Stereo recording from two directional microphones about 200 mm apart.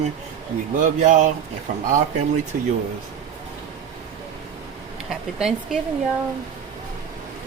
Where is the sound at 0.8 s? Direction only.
40° right (ahead or behind).